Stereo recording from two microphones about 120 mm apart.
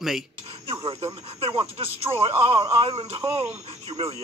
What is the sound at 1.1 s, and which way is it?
Speech, 55° right (ahead or behind).